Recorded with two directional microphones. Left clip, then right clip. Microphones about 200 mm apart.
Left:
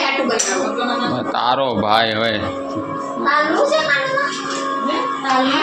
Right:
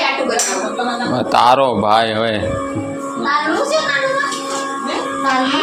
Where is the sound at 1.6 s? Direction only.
10° right (ahead or behind).